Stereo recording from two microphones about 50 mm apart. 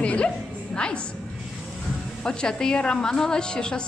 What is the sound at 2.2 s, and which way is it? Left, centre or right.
A woman's voice, centre.